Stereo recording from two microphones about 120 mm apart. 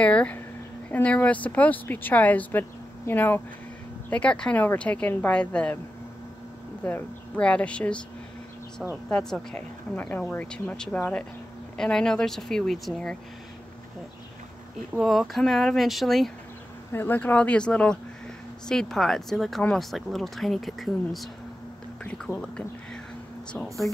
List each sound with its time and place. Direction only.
0.0 s speech: 10° left (ahead or behind)
6.8 s speech: 15° left (ahead or behind)
8.8 s speech: centre (ahead or behind)
15.0 s speech: centre (ahead or behind)
16.9 s speech: 15° left (ahead or behind)